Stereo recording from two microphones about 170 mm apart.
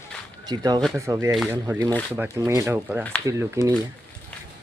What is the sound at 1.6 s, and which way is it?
Speech, 20° right (ahead or behind).